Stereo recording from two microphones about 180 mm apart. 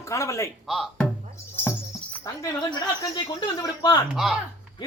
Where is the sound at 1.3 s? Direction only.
15° left (ahead or behind).